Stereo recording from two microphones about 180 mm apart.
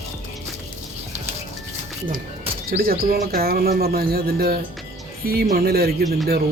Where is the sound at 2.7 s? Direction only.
55° right (ahead or behind).